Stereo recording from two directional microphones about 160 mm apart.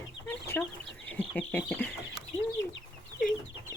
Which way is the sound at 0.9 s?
10° left (ahead or behind).